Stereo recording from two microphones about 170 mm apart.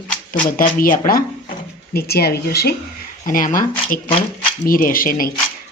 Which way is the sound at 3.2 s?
55° left (ahead or behind).